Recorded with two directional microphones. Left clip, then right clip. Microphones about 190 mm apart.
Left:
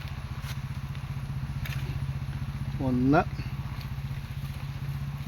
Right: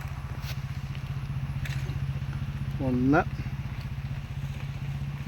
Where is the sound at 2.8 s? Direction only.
30° left (ahead or behind).